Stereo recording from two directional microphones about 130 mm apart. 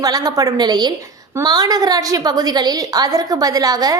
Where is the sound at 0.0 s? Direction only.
30° right (ahead or behind).